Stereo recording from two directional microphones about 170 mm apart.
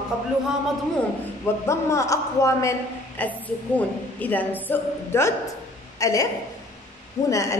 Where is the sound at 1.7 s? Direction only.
15° left (ahead or behind).